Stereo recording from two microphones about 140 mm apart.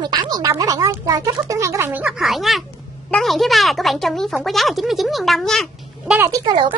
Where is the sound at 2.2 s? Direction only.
Centre (ahead or behind).